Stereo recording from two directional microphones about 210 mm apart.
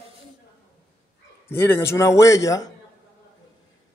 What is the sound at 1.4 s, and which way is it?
Speech, 10° left (ahead or behind).